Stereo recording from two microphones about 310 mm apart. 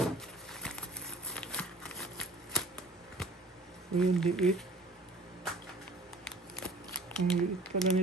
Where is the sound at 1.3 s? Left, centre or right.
Centre.